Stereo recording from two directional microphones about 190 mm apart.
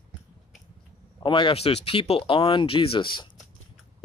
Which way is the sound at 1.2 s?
25° left (ahead or behind).